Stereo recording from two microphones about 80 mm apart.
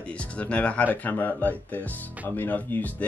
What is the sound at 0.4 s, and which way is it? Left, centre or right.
Speech, centre.